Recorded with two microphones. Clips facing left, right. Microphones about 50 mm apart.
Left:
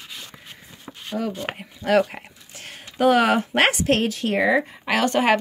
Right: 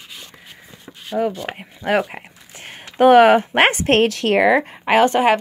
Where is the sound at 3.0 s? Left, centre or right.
Right.